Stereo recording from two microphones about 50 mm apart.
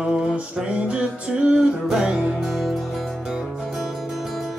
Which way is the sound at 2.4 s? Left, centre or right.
Centre.